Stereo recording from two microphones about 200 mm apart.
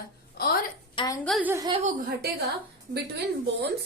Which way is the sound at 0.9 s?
25° left (ahead or behind).